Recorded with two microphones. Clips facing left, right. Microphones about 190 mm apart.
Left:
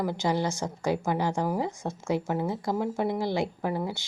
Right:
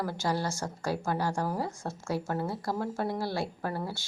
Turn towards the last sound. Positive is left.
turn(degrees=15)  # may be behind; listen again after turning